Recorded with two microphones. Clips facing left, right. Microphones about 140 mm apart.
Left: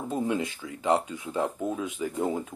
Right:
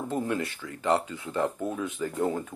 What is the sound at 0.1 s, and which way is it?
Speech, 15° left (ahead or behind).